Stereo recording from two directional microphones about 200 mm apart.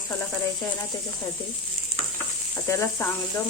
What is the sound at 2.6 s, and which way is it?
Speech, 15° left (ahead or behind).